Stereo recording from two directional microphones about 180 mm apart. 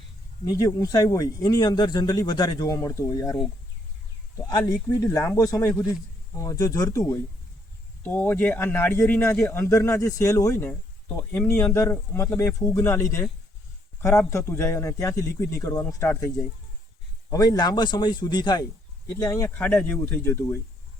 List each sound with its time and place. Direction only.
0.4 s speech: 20° left (ahead or behind)
4.4 s speech: 20° left (ahead or behind)
8.0 s speech: 10° left (ahead or behind)
17.3 s speech: 20° left (ahead or behind)